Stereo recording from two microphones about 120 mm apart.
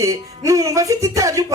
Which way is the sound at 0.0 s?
25° right (ahead or behind).